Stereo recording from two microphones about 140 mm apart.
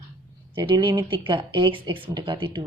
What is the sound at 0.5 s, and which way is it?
A woman's voice, 35° right (ahead or behind).